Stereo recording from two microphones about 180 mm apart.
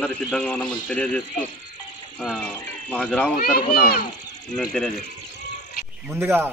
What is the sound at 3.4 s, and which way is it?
Speech, 55° left (ahead or behind).